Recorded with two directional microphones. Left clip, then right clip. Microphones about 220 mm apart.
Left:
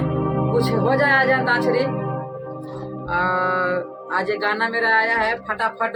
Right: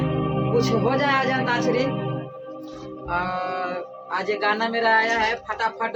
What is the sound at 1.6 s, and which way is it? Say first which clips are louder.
Speech: left 2 dB; 20° left (ahead or behind).